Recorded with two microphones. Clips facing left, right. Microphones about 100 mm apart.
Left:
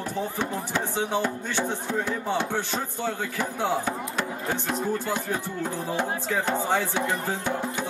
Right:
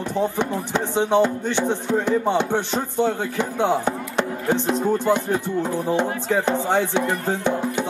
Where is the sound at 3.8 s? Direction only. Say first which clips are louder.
Right 5 dB; 20° right (ahead or behind).